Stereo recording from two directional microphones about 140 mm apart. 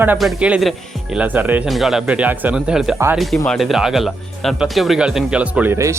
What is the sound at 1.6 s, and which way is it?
Speech, centre (ahead or behind).